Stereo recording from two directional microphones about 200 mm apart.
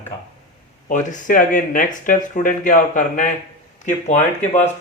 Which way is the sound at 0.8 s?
40° left (ahead or behind).